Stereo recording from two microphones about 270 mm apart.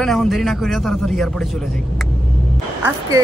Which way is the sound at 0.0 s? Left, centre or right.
Centre.